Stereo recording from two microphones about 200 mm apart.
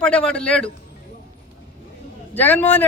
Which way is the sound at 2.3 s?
10° left (ahead or behind).